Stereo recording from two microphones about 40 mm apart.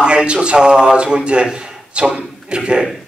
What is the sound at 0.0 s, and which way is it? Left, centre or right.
A man's voice, right.